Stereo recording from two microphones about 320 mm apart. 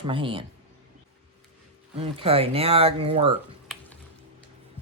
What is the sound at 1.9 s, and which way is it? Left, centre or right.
Speech, centre.